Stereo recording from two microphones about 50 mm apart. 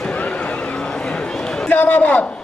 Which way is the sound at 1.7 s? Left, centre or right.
Left.